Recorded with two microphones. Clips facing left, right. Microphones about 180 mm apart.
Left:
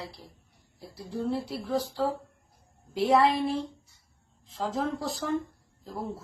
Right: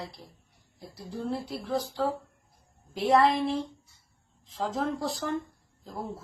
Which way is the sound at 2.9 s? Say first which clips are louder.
Even; 5° left (ahead or behind).